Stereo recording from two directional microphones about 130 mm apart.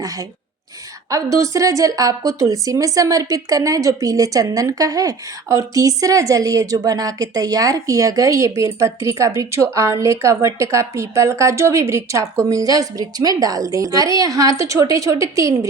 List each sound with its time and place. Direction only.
0.0 s speech: 30° right (ahead or behind)